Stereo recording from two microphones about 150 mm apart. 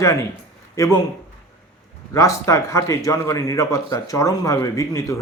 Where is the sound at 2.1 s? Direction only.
20° left (ahead or behind).